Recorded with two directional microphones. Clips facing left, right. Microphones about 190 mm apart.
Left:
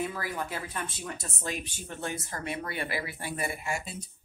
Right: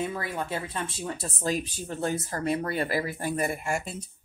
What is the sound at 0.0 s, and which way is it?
Speech, 25° right (ahead or behind).